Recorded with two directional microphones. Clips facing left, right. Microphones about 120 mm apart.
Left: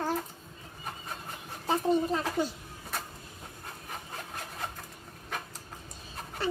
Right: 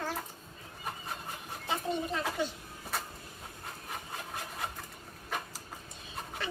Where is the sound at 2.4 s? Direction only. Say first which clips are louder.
Left 4 dB; 40° left (ahead or behind).